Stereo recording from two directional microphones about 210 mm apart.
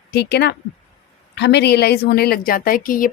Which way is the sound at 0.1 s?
50° left (ahead or behind).